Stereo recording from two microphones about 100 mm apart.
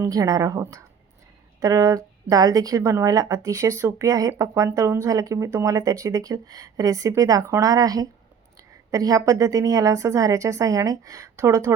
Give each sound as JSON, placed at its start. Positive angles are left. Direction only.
{"t": 0.0, "sound": "a woman's voice", "side_deg": -35}